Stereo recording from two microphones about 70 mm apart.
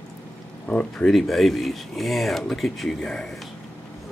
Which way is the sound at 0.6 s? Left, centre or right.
Centre.